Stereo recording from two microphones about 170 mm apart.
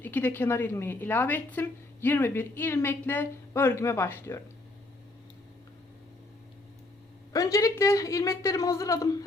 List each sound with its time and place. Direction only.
0.0 s a woman's voice: 10° left (ahead or behind)
7.3 s speech: 20° left (ahead or behind)